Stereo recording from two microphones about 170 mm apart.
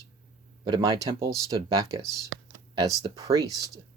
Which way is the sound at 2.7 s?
25° right (ahead or behind).